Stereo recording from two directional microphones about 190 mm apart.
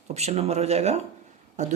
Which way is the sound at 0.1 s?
35° right (ahead or behind).